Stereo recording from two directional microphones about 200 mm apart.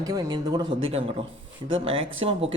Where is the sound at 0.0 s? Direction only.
20° right (ahead or behind).